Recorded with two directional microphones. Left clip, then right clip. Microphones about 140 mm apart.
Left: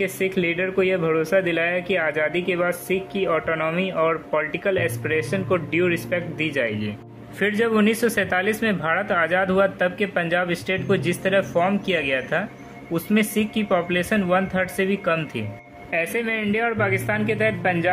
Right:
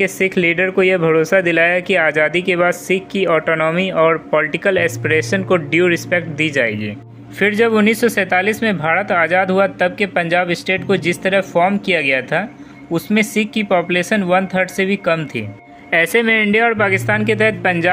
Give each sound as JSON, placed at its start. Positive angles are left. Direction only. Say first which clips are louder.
{"t": 0.0, "sound": "speech", "louder": "right 7 dB", "side_deg": -35}
{"t": 7.3, "sound": "speech", "louder": "right 7 dB", "side_deg": -40}
{"t": 15.9, "sound": "speech", "louder": "right 10 dB", "side_deg": -50}